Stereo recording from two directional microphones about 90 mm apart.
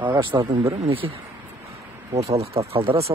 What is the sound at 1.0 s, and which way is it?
Speech, 50° right (ahead or behind).